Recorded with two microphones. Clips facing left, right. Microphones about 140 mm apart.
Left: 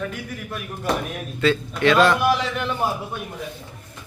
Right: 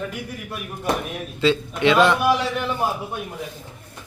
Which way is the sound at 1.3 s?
20° right (ahead or behind).